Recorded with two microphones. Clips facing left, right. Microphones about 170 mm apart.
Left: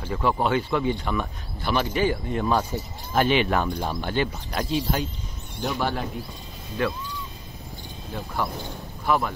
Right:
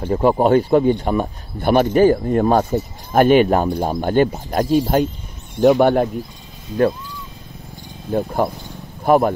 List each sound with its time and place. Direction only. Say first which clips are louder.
0.1 s speech: right 9 dB; 45° right (ahead or behind)
3.9 s speech: right 10 dB; 45° right (ahead or behind)
8.1 s speech: right 10 dB; 50° right (ahead or behind)